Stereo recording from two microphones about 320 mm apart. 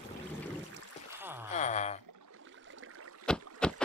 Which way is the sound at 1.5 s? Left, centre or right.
Left.